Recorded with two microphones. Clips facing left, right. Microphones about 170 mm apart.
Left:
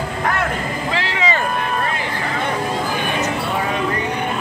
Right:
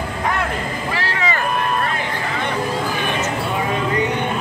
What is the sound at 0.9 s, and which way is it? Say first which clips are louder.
Vehicle: left 2 dB; 20° left (ahead or behind).